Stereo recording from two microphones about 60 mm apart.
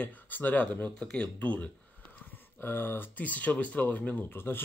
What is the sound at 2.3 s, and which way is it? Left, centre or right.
Speech, left.